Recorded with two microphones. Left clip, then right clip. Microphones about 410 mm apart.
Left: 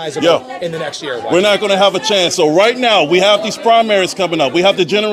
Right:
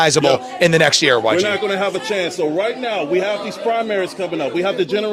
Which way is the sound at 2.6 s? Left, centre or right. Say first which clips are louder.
Left 9 dB; left.